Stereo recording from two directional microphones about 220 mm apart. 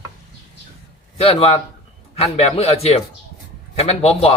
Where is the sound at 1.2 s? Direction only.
25° left (ahead or behind).